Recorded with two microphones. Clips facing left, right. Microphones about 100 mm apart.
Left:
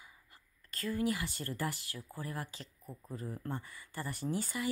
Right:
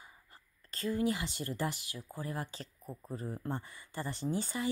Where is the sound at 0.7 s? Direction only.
25° right (ahead or behind).